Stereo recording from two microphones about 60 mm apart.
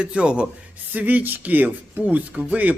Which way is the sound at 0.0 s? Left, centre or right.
Centre.